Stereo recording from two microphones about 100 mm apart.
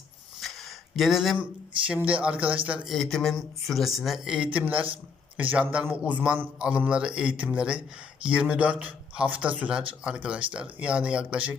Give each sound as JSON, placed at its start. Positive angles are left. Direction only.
{"t": 0.3, "sound": "a sound", "side_deg": 0}
{"t": 1.9, "sound": "a man's voice", "side_deg": -15}
{"t": 2.9, "sound": "speech", "side_deg": 5}
{"t": 4.4, "sound": "a man's voice", "side_deg": -15}